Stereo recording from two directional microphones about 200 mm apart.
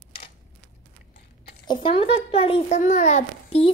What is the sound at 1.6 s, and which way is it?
A child's voice, 25° left (ahead or behind).